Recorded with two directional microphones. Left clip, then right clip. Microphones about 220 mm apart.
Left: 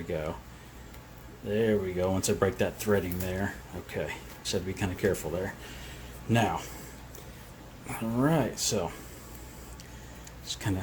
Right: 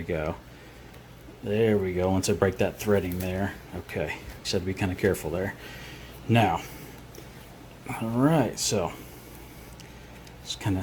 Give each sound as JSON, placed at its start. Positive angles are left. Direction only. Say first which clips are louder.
{"t": 0.1, "sound": "speech", "louder": "right 4 dB", "side_deg": -20}
{"t": 1.5, "sound": "speech", "louder": "right 3 dB", "side_deg": -20}
{"t": 7.9, "sound": "speech", "louder": "right 3 dB", "side_deg": -15}
{"t": 10.4, "sound": "speech", "louder": "right 3 dB", "side_deg": -10}